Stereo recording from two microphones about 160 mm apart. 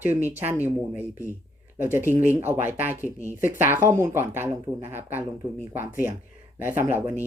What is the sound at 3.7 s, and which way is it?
Speech, 15° right (ahead or behind).